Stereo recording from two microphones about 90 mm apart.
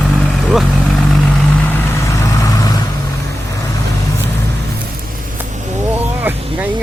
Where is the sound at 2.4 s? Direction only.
40° left (ahead or behind).